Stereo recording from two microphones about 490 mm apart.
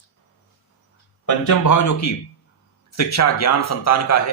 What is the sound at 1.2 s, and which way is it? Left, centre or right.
Speech, left.